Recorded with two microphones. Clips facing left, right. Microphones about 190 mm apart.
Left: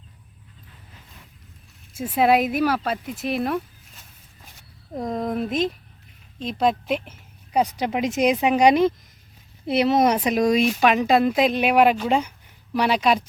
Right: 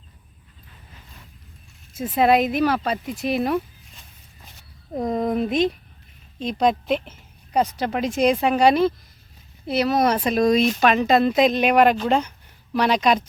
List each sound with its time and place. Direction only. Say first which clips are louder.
2.0 s a woman's voice: right 1 dB; 5° left (ahead or behind)